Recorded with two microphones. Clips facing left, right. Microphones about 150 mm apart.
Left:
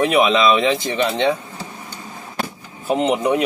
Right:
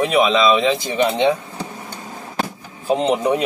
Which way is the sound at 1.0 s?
15° right (ahead or behind).